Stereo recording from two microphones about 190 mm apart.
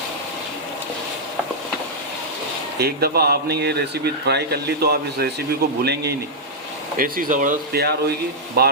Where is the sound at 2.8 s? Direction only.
55° right (ahead or behind).